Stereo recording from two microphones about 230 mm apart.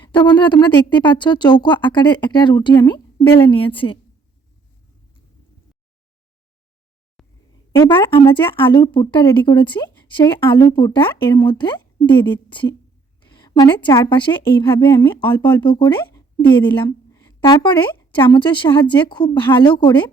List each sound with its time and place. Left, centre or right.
0.0 s a woman's voice: centre
7.9 s a woman's voice: left
13.2 s a sound: centre
13.8 s a woman's voice: centre
16.6 s a sound: left
18.1 s a woman's voice: left